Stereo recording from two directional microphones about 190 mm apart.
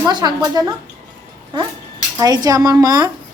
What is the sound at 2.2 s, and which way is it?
Speech, 20° right (ahead or behind).